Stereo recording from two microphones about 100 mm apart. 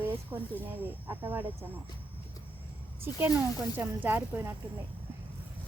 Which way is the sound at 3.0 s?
20° right (ahead or behind).